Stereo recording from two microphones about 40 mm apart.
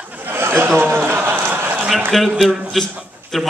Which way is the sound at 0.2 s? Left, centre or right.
Right.